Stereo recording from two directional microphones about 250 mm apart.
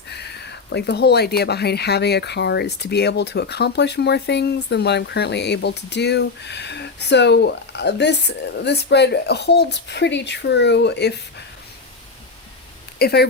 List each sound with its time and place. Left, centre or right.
0.1 s speech: left
13.0 s speech: left